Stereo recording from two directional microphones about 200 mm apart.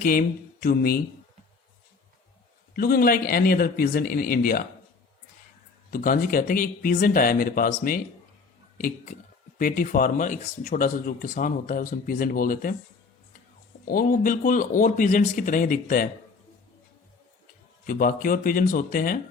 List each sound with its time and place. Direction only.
0.0 s speech: 45° left (ahead or behind)
2.7 s speech: 50° left (ahead or behind)
5.9 s speech: 45° left (ahead or behind)
9.6 s speech: 45° left (ahead or behind)
13.8 s speech: 45° left (ahead or behind)
17.8 s speech: 45° left (ahead or behind)